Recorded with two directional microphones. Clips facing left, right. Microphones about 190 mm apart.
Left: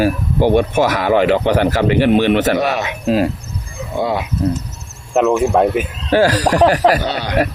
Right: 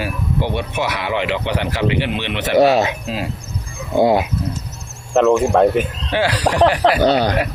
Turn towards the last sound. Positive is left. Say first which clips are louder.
# right 7 dB
turn(degrees=-45)  # may be behind; listen again after turning